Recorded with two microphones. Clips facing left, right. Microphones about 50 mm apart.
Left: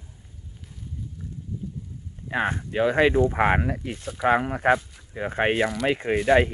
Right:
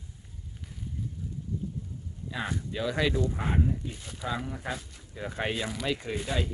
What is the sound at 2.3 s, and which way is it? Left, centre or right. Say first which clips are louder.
Speech: left 8 dB; left.